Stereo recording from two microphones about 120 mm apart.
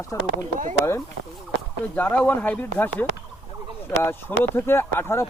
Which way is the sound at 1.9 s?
15° left (ahead or behind).